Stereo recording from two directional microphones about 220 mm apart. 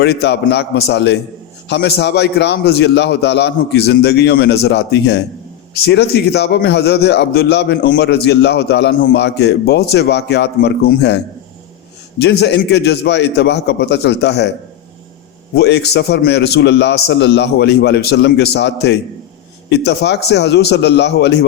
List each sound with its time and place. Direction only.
0.0 s a man's voice: 50° left (ahead or behind)
12.2 s a man's voice: 50° left (ahead or behind)
15.5 s a man's voice: 50° left (ahead or behind)